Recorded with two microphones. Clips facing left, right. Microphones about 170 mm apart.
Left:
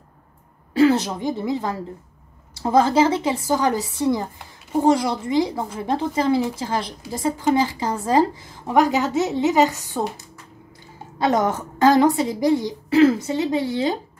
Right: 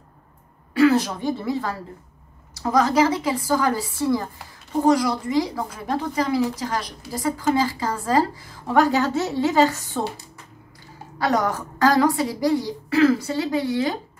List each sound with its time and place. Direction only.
0.7 s a woman's voice: 25° left (ahead or behind)
11.1 s a woman's voice: 25° left (ahead or behind)